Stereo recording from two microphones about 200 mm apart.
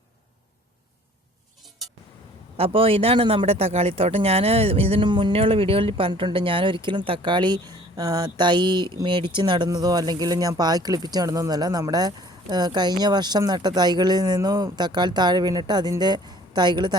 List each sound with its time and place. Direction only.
2.6 s speech: 30° right (ahead or behind)